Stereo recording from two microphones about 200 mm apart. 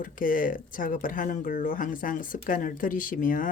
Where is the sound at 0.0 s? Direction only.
45° left (ahead or behind).